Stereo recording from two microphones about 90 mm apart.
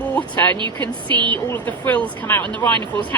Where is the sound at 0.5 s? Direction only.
60° right (ahead or behind).